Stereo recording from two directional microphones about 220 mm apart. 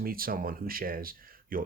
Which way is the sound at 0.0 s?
40° right (ahead or behind).